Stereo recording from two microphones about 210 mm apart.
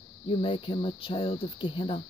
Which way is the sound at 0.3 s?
25° left (ahead or behind).